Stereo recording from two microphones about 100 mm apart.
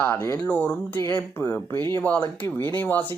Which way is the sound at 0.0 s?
20° left (ahead or behind).